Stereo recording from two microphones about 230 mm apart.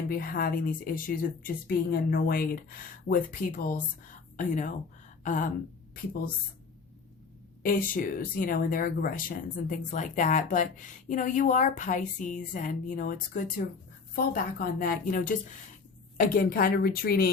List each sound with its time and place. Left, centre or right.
0.1 s speech: left
5.2 s a sound: left
7.6 s speech: left